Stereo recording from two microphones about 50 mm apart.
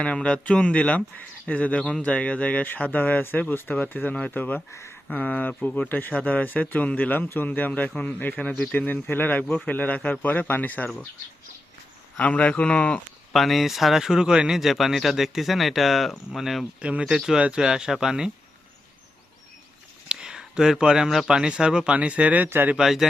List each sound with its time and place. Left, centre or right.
0.0 s a man's voice: left
4.7 s speech: left
5.1 s a man's voice: left
12.2 s speech: left
13.3 s speech: centre
16.8 s speech: right
17.2 s speech: centre
20.1 s a sound: centre
21.2 s speech: centre
22.8 s speech: centre